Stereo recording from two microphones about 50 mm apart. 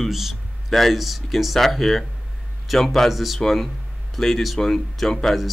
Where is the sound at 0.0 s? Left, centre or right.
Centre.